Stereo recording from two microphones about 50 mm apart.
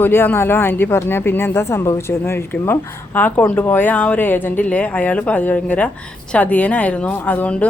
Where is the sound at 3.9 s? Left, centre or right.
Left.